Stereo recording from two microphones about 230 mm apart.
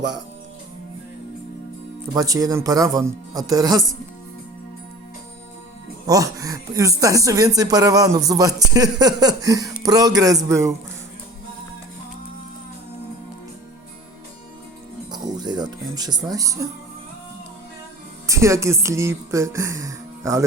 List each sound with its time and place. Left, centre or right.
2.1 s speech: centre
6.1 s speech: centre
15.1 s music: centre
18.3 s speech: centre